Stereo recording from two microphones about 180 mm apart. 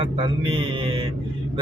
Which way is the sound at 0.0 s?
30° right (ahead or behind).